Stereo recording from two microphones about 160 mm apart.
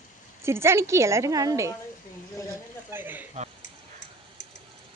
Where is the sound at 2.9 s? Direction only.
10° right (ahead or behind).